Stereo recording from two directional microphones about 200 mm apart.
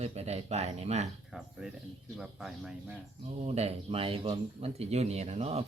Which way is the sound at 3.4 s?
30° right (ahead or behind).